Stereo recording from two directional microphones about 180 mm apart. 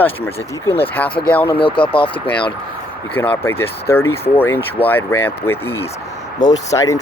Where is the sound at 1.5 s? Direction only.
30° left (ahead or behind).